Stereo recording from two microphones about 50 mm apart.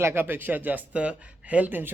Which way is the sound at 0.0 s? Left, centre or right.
Right.